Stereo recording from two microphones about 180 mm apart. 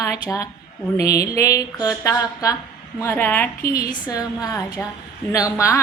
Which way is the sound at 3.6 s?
55° left (ahead or behind).